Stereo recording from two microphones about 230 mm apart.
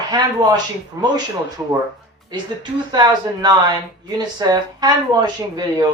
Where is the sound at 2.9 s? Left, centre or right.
Centre.